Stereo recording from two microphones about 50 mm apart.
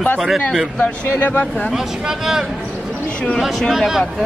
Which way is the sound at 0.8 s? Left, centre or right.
Left.